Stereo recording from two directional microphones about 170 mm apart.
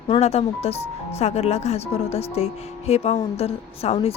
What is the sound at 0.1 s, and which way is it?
Speech, 40° left (ahead or behind).